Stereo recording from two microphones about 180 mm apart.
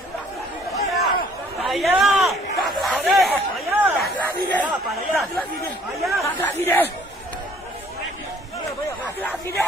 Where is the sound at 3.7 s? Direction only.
10° right (ahead or behind).